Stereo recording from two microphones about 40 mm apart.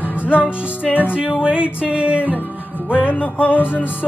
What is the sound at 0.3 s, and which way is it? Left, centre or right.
Music, right.